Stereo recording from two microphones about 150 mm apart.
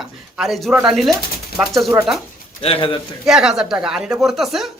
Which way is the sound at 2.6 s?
40° left (ahead or behind).